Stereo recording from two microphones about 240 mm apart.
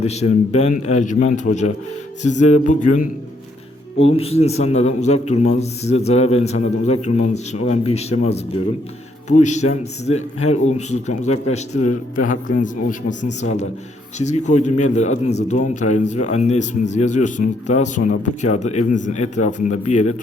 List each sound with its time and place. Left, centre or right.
0.0 s a man's voice: left
4.2 s a man's voice: left